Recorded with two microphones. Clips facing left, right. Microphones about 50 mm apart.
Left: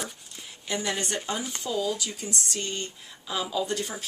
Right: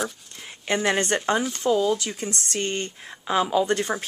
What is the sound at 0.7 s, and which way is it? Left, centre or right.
Speech, right.